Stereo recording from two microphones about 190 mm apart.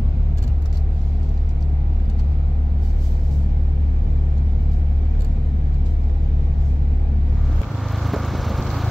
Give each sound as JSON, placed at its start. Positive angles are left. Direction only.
{"t": 8.0, "sound": "vehicle", "side_deg": 0}